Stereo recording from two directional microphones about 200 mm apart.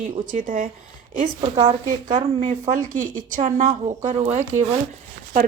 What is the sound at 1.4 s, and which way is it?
A woman's voice, 25° right (ahead or behind).